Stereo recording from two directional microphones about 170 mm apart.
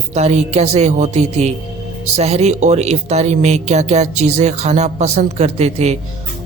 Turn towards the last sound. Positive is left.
turn(degrees=-40)  # may be behind; listen again after turning